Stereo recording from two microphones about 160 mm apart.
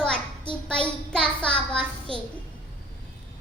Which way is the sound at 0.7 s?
5° left (ahead or behind).